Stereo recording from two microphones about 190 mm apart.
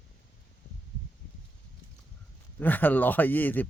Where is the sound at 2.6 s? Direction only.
10° left (ahead or behind).